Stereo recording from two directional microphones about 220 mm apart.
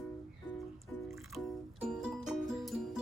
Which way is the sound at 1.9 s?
Centre (ahead or behind).